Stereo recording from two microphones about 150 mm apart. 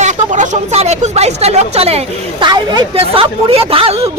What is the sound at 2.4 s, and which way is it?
A woman's voice, 30° right (ahead or behind).